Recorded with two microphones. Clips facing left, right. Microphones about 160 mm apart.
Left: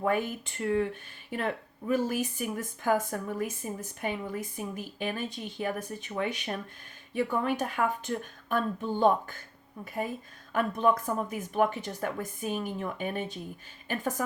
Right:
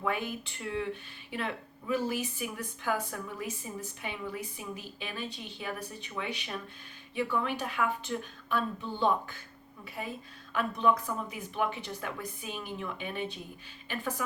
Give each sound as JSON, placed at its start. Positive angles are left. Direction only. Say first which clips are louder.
{"t": 0.0, "sound": "speech", "louder": "left 5 dB", "side_deg": 45}